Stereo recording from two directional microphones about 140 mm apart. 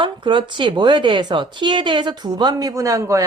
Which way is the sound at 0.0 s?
35° right (ahead or behind).